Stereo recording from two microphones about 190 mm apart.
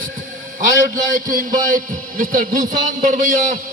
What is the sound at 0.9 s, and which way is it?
A man's voice, 45° right (ahead or behind).